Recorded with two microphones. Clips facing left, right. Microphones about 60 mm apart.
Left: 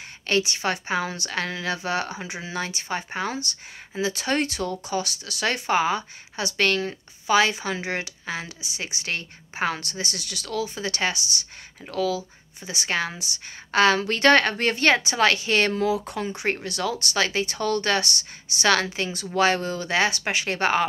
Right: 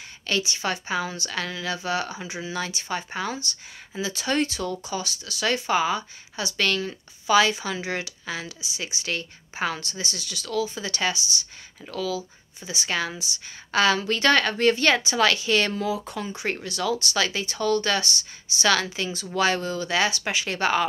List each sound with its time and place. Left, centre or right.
0.3 s a woman's voice: left
2.5 s speech: left
10.8 s speech: left